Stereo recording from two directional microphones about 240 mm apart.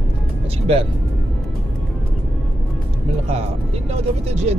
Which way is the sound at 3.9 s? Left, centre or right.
Right.